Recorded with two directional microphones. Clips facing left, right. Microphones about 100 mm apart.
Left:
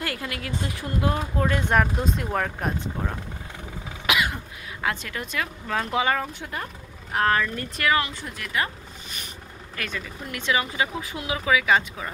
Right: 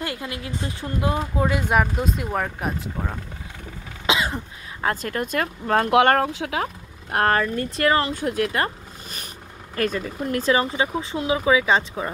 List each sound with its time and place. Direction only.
0.0 s speech: 20° right (ahead or behind)
1.1 s speech: 15° right (ahead or behind)
4.0 s cough: 25° right (ahead or behind)
4.8 s speech: 45° right (ahead or behind); by 7.2 s 90° right
7.2 s speech: 40° right (ahead or behind)
8.1 s speech: 50° right (ahead or behind); by 12.1 s 30° right (ahead or behind)